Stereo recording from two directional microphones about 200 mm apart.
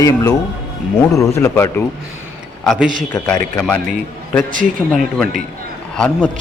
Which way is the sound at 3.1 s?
10° left (ahead or behind).